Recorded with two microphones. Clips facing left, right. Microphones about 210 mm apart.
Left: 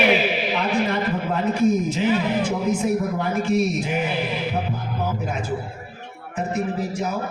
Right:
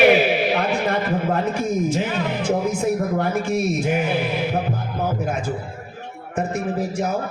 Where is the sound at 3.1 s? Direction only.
50° right (ahead or behind).